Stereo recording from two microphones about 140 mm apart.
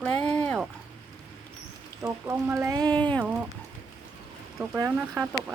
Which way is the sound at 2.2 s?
20° right (ahead or behind).